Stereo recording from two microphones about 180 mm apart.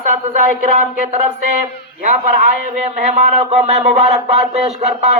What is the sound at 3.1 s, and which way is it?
Speech, 40° right (ahead or behind).